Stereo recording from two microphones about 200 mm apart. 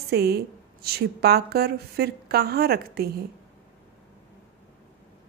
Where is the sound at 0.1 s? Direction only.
50° right (ahead or behind).